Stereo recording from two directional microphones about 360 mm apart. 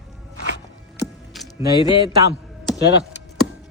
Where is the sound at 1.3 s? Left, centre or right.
Centre.